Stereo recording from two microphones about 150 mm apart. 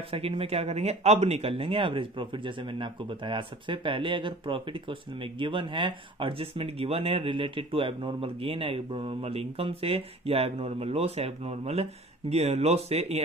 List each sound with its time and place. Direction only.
0.1 s speech: 40° right (ahead or behind)